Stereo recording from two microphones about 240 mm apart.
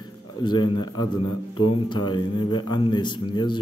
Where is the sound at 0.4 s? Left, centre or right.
Centre.